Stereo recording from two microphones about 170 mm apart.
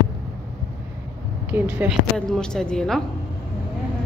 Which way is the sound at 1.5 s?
10° right (ahead or behind).